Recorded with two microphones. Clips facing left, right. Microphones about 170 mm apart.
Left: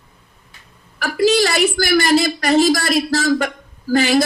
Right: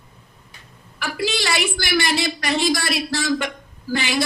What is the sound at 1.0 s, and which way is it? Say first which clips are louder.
A woman's voice: left 9 dB; 40° left (ahead or behind).